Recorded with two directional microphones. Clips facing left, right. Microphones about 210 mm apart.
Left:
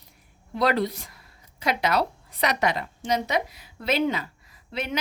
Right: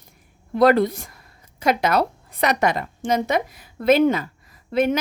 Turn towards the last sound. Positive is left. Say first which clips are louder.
# right 12 dB
turn(degrees=-50)  # may be behind; listen again after turning